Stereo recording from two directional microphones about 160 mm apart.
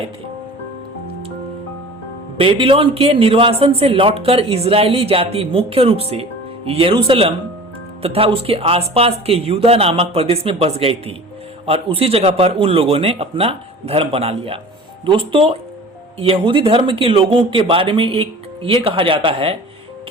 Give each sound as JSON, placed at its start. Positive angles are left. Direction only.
{"t": 2.4, "sound": "speech", "side_deg": -35}